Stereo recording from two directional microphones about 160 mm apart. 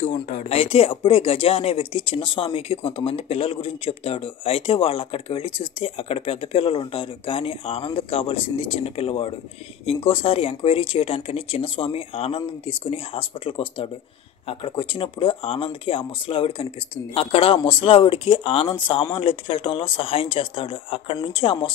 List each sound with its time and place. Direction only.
0.0 s speech: 40° left (ahead or behind)